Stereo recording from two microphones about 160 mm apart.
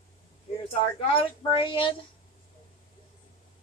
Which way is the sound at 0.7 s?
35° left (ahead or behind).